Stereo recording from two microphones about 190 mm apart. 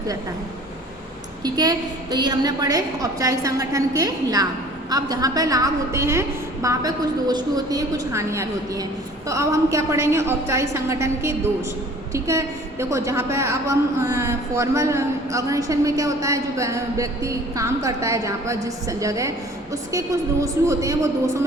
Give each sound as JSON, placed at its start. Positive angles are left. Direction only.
{"t": 1.5, "sound": "a woman's voice", "side_deg": -20}